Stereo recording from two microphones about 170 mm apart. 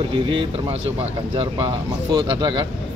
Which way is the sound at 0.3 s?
30° right (ahead or behind).